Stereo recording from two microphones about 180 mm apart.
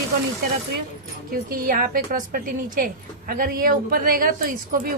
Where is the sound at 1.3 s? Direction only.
55° right (ahead or behind).